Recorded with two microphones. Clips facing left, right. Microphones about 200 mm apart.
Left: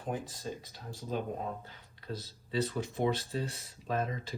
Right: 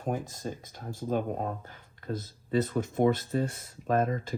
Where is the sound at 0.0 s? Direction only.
45° right (ahead or behind).